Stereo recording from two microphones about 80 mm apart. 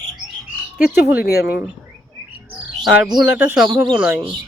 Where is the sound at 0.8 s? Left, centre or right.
Right.